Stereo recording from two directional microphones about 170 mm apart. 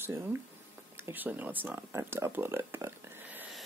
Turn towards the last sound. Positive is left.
turn(degrees=-10)  # may be behind; listen again after turning